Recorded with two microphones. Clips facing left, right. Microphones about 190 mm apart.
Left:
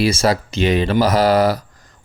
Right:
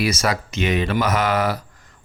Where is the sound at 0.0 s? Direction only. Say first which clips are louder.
Left 5 dB; 30° left (ahead or behind).